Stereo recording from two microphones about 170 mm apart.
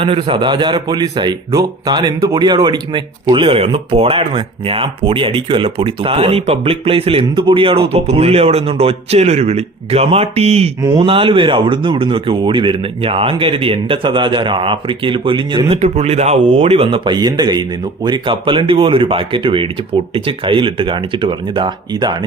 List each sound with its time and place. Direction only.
0.0 s a man's voice: 30° right (ahead or behind)